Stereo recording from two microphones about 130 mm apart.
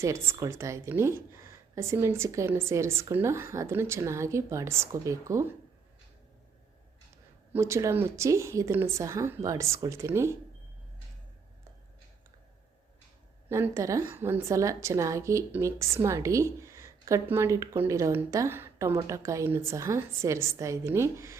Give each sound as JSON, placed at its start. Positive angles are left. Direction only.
{"t": 0.0, "sound": "a woman's voice", "side_deg": -20}
{"t": 7.5, "sound": "a woman's voice", "side_deg": -20}
{"t": 13.5, "sound": "a woman's voice", "side_deg": -20}